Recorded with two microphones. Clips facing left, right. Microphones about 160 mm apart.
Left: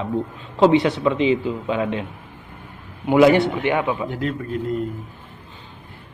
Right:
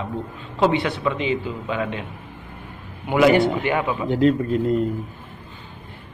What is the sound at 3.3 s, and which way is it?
Speech, 20° left (ahead or behind).